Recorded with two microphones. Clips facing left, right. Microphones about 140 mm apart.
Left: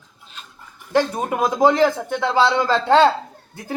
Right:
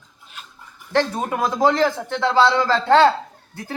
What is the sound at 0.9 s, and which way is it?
Speech, 15° left (ahead or behind).